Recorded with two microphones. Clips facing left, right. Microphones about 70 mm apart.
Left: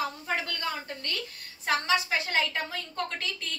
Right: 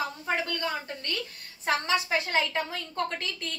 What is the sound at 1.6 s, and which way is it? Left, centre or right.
Speech, right.